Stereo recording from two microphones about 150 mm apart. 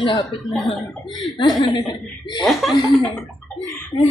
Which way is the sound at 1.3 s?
30° left (ahead or behind).